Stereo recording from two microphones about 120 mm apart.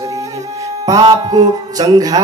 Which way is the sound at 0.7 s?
30° right (ahead or behind).